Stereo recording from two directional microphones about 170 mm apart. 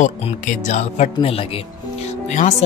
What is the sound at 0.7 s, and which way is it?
Speech, 45° left (ahead or behind).